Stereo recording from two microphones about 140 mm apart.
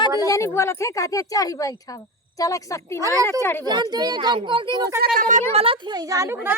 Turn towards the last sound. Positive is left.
turn(degrees=-20)  # may be behind; listen again after turning